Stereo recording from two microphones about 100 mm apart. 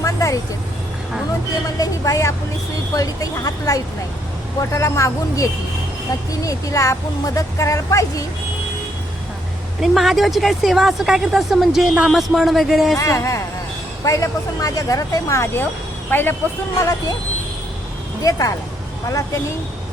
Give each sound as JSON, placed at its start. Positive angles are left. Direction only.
{"t": 0.0, "sound": "vehicle", "side_deg": 35}
{"t": 1.6, "sound": "speech", "side_deg": 35}
{"t": 9.8, "sound": "a woman's voice", "side_deg": 0}
{"t": 13.0, "sound": "speech", "side_deg": 30}
{"t": 16.7, "sound": "speech", "side_deg": 35}
{"t": 18.2, "sound": "speech", "side_deg": 35}